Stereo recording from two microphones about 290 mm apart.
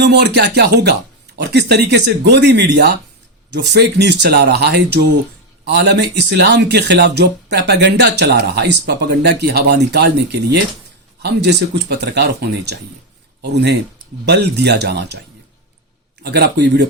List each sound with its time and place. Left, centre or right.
0.0 s speech: right
16.2 s speech: right